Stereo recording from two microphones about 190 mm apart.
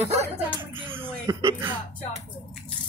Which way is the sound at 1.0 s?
20° right (ahead or behind).